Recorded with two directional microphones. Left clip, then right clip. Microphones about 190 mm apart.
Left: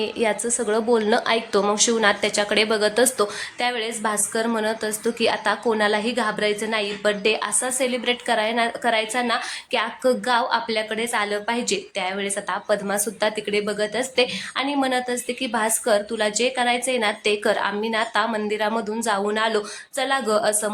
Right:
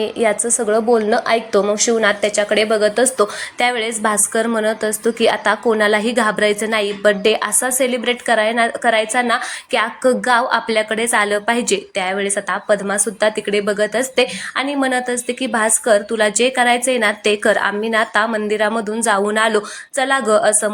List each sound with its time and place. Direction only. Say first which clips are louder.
0.0 s a woman's voice: right 5 dB; 10° right (ahead or behind)
3.6 s a woman's voice: right 7 dB; 20° right (ahead or behind)